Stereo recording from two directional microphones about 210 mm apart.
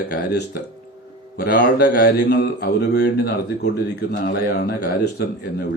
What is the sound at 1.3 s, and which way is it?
Speech, 45° left (ahead or behind).